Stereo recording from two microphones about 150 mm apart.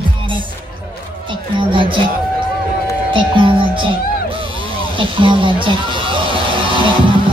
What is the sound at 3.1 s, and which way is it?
Speech, 35° right (ahead or behind).